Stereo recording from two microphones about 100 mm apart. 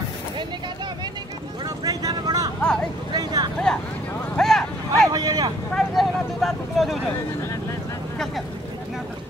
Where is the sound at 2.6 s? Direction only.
10° left (ahead or behind).